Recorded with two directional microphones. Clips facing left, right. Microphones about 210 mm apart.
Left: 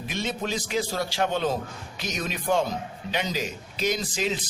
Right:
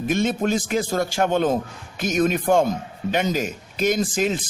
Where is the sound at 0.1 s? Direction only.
50° right (ahead or behind).